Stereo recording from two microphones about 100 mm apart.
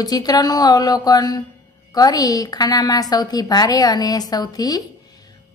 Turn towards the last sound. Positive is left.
turn(degrees=40)  # may be behind; listen again after turning